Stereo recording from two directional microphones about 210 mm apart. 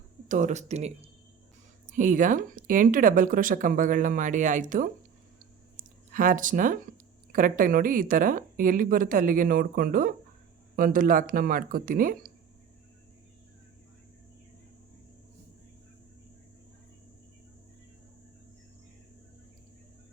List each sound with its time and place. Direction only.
0.3 s speech: 35° right (ahead or behind)